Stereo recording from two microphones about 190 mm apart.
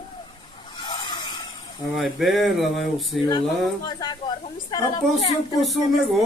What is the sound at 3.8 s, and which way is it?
Speech, 25° left (ahead or behind).